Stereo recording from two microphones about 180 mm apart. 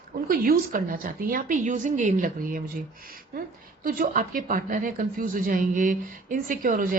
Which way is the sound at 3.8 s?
50° right (ahead or behind).